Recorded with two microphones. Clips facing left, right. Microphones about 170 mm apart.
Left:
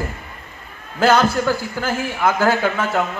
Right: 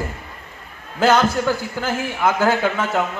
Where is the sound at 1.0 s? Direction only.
20° right (ahead or behind).